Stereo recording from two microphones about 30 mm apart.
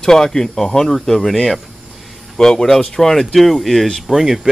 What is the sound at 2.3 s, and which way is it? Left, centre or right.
Speech, left.